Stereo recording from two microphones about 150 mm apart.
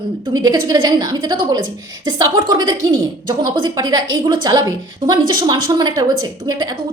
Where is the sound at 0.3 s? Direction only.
25° right (ahead or behind).